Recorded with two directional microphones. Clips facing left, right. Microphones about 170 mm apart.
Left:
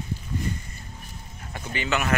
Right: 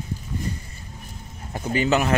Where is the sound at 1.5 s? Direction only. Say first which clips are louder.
Right 7 dB; 40° right (ahead or behind).